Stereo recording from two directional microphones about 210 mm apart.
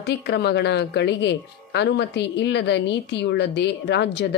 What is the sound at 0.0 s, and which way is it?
Speech, 50° left (ahead or behind).